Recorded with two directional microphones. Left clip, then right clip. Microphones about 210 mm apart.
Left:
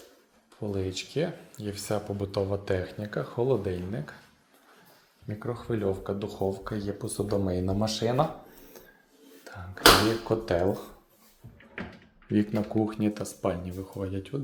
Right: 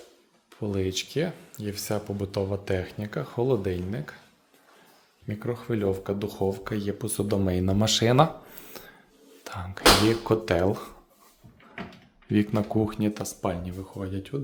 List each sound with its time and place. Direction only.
0.5 s speech: 30° right (ahead or behind)
5.3 s speech: 40° right (ahead or behind)
8.7 s a sound: 40° right (ahead or behind)
9.4 s speech: 40° right (ahead or behind)
12.3 s speech: 25° right (ahead or behind)